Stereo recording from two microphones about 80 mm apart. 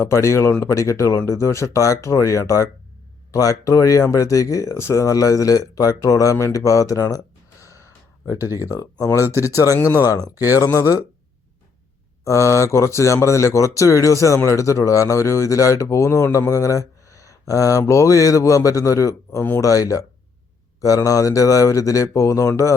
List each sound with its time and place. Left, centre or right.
0.0 s speech: left
7.6 s gasp: left
8.5 s speech: left
12.2 s speech: left